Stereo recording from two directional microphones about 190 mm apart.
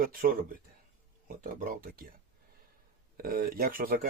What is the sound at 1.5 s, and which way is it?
Speech, 50° right (ahead or behind).